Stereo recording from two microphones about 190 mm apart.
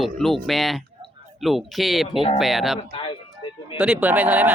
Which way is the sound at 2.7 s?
25° left (ahead or behind).